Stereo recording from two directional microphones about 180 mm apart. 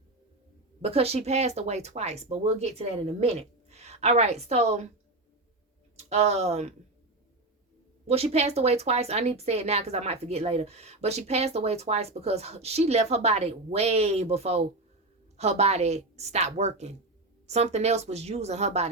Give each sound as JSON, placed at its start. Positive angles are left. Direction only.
{"t": 0.8, "sound": "a woman's voice", "side_deg": -35}
{"t": 6.0, "sound": "a woman's voice", "side_deg": -35}
{"t": 8.0, "sound": "a woman's voice", "side_deg": -35}